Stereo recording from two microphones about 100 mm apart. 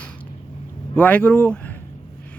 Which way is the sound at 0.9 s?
15° left (ahead or behind).